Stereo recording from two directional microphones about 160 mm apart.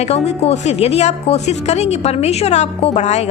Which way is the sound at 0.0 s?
40° left (ahead or behind).